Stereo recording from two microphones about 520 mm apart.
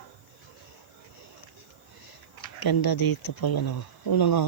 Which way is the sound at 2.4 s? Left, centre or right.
Left.